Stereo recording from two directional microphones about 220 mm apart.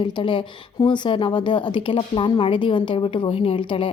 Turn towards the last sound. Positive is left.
turn(degrees=25)  # may be behind; listen again after turning